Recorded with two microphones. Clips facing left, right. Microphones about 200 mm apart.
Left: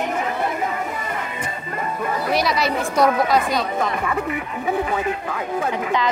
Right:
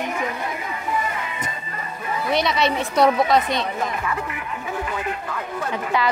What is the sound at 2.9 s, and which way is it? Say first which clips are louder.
Speech: even; 30° right (ahead or behind).